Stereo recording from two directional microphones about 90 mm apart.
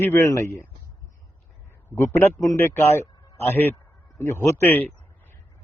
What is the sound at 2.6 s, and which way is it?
A man's voice, 25° left (ahead or behind).